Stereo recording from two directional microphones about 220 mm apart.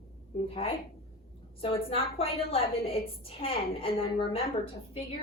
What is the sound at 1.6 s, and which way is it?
A woman's voice, 25° left (ahead or behind).